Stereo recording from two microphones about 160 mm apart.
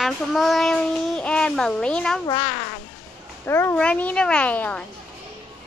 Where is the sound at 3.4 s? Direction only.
15° left (ahead or behind).